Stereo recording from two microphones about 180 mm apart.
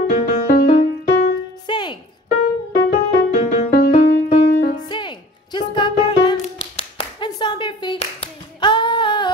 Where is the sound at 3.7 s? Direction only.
60° left (ahead or behind).